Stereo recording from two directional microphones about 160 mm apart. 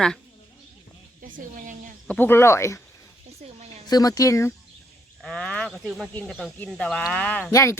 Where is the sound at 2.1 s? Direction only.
15° left (ahead or behind).